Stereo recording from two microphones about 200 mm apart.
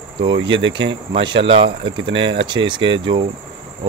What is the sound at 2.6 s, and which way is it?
Speech, 25° right (ahead or behind).